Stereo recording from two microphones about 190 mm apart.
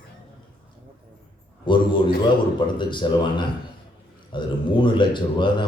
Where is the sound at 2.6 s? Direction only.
25° left (ahead or behind).